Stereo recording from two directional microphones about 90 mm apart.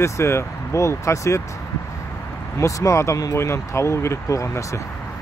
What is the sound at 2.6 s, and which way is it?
Speech, 35° left (ahead or behind).